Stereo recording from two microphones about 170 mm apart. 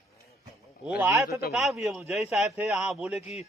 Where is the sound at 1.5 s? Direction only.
Centre (ahead or behind).